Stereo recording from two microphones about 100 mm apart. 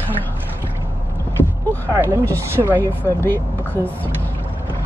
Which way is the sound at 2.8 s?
20° left (ahead or behind).